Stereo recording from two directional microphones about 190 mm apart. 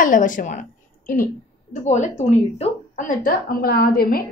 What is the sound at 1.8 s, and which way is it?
A woman's voice, 40° left (ahead or behind).